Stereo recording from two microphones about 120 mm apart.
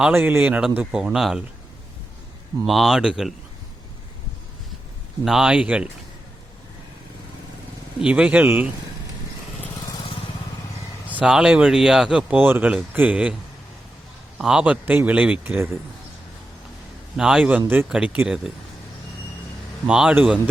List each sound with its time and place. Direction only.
0.1 s speech: 15° right (ahead or behind)
2.6 s speech: centre (ahead or behind)
5.2 s speech: 5° right (ahead or behind)
8.0 s speech: 10° right (ahead or behind)
11.1 s speech: 10° right (ahead or behind)
14.3 s speech: 5° right (ahead or behind)
17.2 s speech: 5° right (ahead or behind)
19.9 s speech: 5° right (ahead or behind)